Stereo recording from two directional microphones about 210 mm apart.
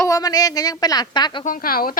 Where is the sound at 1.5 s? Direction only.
40° left (ahead or behind).